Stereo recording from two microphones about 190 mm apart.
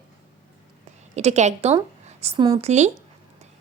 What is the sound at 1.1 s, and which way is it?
A woman's voice, 35° right (ahead or behind).